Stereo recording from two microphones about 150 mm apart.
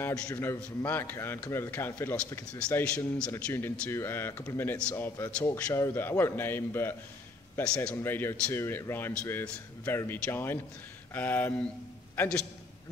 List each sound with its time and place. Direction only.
0.3 s a man's voice: 20° left (ahead or behind)